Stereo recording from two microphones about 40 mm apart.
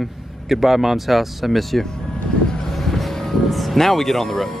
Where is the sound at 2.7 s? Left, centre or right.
Centre.